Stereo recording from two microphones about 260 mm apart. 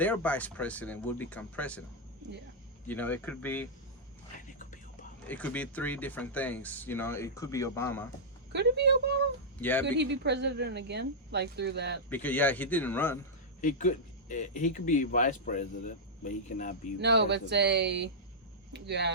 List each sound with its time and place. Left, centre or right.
0.0 s speech: centre
2.8 s speech: centre
4.4 s whispering: left
5.3 s speech: centre
8.5 s speech: right
9.6 s speech: centre
9.8 s speech: right
12.0 s speech: centre
13.6 s speech: left
17.0 s speech: right